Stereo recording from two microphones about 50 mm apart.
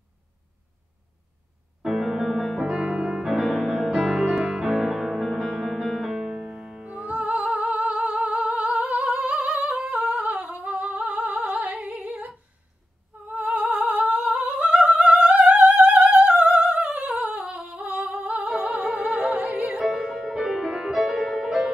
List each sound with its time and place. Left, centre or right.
1.9 s music: centre
2.6 s music: centre
3.3 s music: centre
5.3 s music: centre
6.8 s music: right
7.9 s humming: right
9.1 s music: right
9.8 s humming: right
11.9 s a sound: right
13.3 s humming: right
14.6 s opera: right
18.5 s music: right
19.3 s music: right
19.8 s music: centre